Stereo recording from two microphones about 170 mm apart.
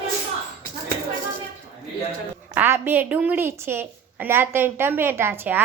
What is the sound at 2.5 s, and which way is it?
A woman's voice, 10° right (ahead or behind).